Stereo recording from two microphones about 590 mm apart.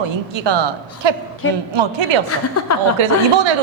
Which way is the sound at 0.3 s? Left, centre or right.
Right.